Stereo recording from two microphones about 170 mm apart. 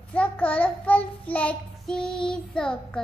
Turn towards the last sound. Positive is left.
turn(degrees=5)  # may be behind; listen again after turning